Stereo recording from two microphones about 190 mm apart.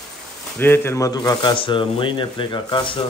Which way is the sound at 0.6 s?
10° left (ahead or behind).